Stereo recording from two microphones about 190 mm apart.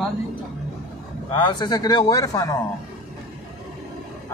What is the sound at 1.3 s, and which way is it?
A man's voice, 25° left (ahead or behind).